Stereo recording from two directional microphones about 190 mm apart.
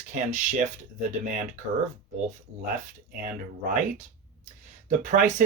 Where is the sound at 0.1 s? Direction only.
40° right (ahead or behind).